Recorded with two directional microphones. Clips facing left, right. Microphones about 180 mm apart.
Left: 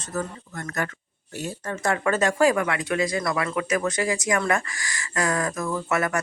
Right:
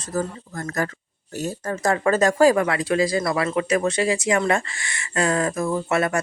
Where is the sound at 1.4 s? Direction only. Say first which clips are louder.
Right 4 dB; 40° right (ahead or behind).